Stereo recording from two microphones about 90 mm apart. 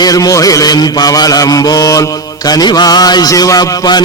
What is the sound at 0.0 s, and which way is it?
Mantra, 40° left (ahead or behind).